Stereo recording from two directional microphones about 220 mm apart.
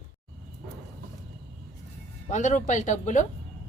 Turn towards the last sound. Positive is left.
turn(degrees=35)  # may be behind; listen again after turning